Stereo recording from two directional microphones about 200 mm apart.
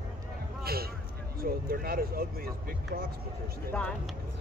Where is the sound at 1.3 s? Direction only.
50° right (ahead or behind).